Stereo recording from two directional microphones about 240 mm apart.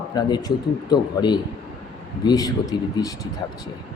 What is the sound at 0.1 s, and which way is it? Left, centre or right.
A man's voice, centre.